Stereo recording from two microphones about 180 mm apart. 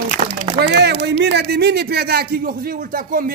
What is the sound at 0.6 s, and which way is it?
A man's voice, 65° right (ahead or behind).